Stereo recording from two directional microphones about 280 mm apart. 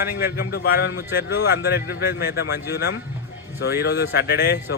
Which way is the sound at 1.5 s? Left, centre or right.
Left.